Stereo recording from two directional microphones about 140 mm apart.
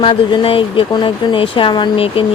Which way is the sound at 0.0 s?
40° left (ahead or behind).